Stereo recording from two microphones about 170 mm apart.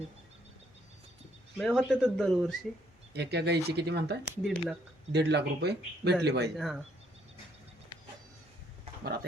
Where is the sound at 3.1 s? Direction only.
75° right (ahead or behind).